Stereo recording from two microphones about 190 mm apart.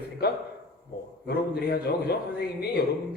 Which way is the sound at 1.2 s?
55° left (ahead or behind).